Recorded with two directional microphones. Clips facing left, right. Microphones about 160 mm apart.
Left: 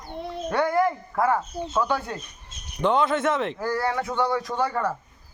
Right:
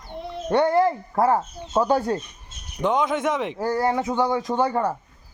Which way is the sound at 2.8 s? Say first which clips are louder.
Even; 10° right (ahead or behind).